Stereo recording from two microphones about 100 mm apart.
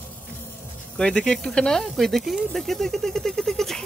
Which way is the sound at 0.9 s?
10° left (ahead or behind).